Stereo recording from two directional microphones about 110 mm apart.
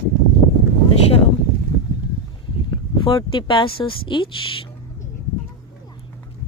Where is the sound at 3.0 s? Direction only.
45° left (ahead or behind).